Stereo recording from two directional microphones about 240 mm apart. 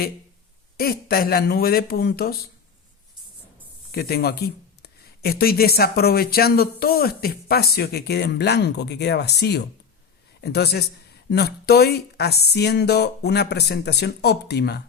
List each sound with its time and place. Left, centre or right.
0.8 s speech: left
3.9 s speech: left